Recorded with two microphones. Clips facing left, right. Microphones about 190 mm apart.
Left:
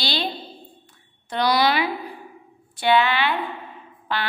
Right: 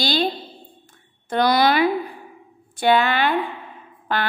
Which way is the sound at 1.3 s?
50° right (ahead or behind).